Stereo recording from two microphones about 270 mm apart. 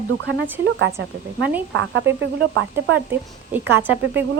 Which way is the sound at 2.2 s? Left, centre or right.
Right.